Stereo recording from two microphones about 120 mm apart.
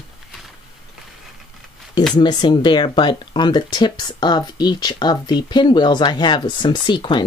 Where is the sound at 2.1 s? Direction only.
40° left (ahead or behind).